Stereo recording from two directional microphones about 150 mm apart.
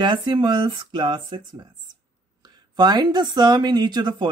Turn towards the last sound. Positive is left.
turn(degrees=-30)  # may be behind; listen again after turning